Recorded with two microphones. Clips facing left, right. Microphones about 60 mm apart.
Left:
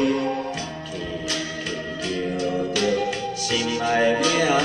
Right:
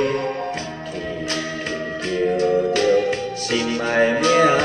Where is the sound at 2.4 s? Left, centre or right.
Right.